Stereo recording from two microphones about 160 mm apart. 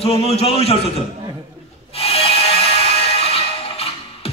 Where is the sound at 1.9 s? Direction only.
40° left (ahead or behind).